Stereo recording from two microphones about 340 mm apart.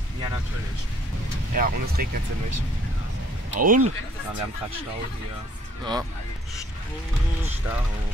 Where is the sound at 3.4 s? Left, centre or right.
Right.